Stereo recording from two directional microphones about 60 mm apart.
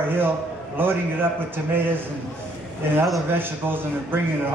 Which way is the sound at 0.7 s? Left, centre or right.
Right.